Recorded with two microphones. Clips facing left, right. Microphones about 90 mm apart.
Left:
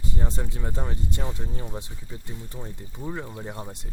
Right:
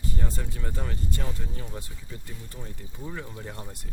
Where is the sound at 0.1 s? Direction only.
20° left (ahead or behind).